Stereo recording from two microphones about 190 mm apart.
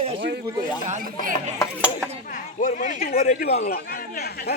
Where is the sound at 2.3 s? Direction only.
40° left (ahead or behind).